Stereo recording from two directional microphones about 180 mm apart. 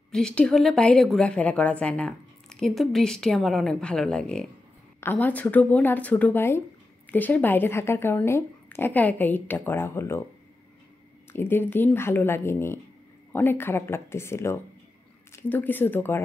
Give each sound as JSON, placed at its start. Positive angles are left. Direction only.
{"t": 0.1, "sound": "a woman's voice", "side_deg": 5}
{"t": 11.3, "sound": "a woman's voice", "side_deg": 10}